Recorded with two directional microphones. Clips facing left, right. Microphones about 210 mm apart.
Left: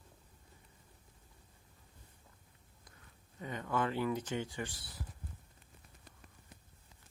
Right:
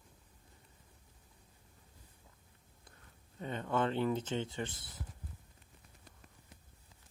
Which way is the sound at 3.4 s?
30° right (ahead or behind).